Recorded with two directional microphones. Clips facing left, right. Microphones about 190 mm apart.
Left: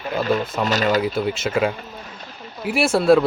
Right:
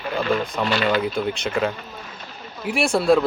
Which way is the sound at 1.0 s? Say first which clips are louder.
Left 2 dB; 5° left (ahead or behind).